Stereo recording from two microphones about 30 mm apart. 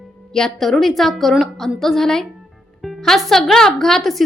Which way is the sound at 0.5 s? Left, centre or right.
Centre.